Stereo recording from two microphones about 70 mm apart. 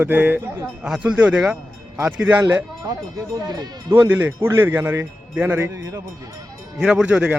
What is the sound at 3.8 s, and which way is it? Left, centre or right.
A man's voice, right.